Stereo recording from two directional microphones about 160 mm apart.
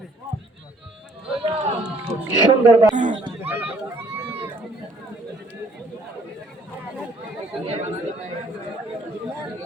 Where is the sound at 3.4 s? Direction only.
15° right (ahead or behind).